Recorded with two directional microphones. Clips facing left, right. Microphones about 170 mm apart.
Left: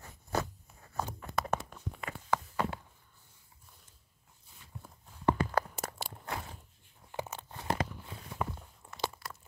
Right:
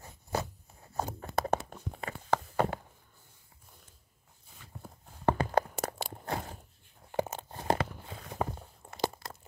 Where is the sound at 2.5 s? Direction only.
50° right (ahead or behind).